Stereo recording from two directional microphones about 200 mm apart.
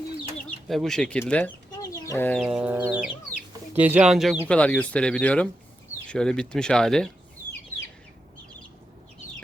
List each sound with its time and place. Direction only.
0.7 s speech: centre (ahead or behind)
1.7 s chicken: 15° left (ahead or behind)
2.4 s speech: 5° right (ahead or behind)
2.8 s chicken: 5° right (ahead or behind)
3.8 s speech: 5° right (ahead or behind)